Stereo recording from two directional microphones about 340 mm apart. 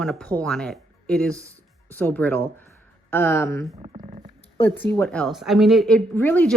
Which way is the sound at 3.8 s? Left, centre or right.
Centre.